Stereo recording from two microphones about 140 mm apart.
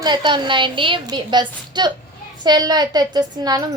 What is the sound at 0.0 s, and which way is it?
A woman's voice, 35° right (ahead or behind).